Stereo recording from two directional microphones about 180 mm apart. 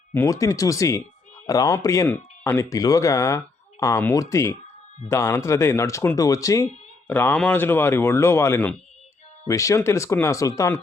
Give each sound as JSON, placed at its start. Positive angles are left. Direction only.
{"t": 0.1, "sound": "speech", "side_deg": 15}